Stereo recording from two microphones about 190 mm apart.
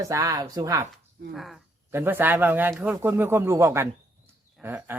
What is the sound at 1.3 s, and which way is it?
Speech, centre (ahead or behind).